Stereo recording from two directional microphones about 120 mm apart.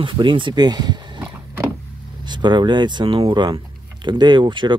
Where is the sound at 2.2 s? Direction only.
40° right (ahead or behind).